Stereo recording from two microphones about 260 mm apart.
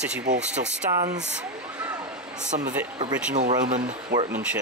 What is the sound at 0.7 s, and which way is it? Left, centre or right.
Speech, centre.